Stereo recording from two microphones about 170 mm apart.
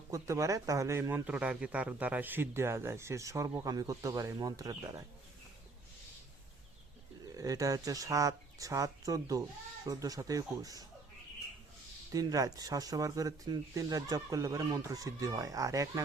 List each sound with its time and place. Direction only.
0.1 s speech: 20° right (ahead or behind)
7.3 s speech: 20° right (ahead or behind)
12.1 s speech: 20° right (ahead or behind)